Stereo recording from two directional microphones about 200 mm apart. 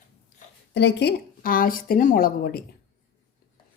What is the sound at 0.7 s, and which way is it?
A woman's voice, 60° left (ahead or behind).